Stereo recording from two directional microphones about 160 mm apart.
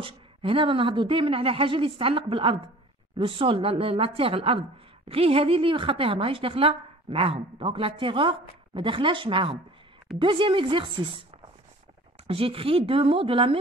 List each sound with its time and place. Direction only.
0.0 s a woman's voice: 35° right (ahead or behind)
12.3 s a woman's voice: 35° right (ahead or behind)